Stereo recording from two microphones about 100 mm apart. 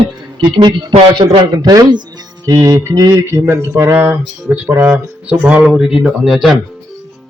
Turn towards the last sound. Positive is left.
turn(degrees=0)  # may be behind; listen again after turning